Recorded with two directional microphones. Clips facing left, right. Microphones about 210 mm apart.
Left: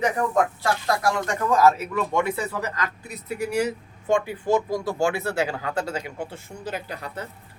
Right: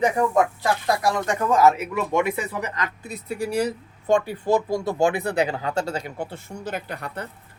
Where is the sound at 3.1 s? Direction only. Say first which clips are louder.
Right 2 dB; 30° right (ahead or behind).